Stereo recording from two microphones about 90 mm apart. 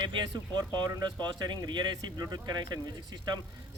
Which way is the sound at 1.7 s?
50° right (ahead or behind).